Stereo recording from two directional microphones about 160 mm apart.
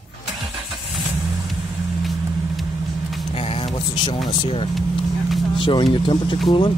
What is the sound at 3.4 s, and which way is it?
Vehicle, 40° left (ahead or behind).